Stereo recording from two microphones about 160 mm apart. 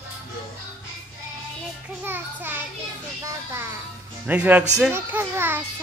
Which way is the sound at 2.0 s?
10° right (ahead or behind).